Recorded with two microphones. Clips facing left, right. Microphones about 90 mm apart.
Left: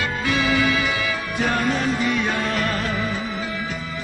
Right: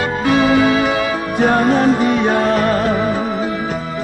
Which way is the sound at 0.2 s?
40° right (ahead or behind).